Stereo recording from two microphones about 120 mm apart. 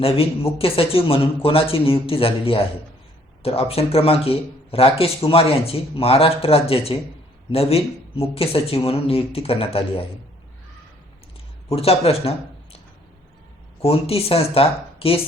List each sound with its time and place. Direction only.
0.0 s a man's voice: 55° left (ahead or behind)
11.7 s speech: 55° left (ahead or behind)
13.8 s a man's voice: 55° left (ahead or behind)
14.9 s a sound: 50° left (ahead or behind)